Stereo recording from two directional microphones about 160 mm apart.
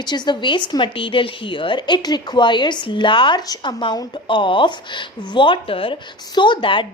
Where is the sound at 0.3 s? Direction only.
30° left (ahead or behind).